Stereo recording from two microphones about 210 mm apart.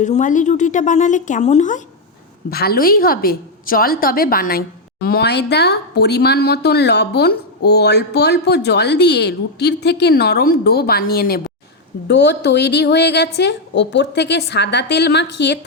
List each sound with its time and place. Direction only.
0.0 s a woman's voice: 35° left (ahead or behind)
2.5 s speech: 45° left (ahead or behind)